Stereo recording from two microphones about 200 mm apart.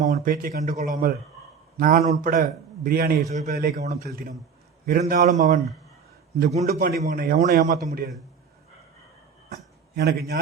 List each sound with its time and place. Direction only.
0.0 s a man's voice: 45° right (ahead or behind)
6.7 s a man's voice: 45° right (ahead or behind)
9.9 s a man's voice: 55° right (ahead or behind)